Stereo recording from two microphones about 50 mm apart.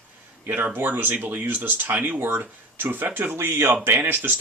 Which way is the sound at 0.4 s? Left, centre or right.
Right.